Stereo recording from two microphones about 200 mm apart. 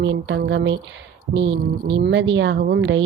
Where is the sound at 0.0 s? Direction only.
65° right (ahead or behind).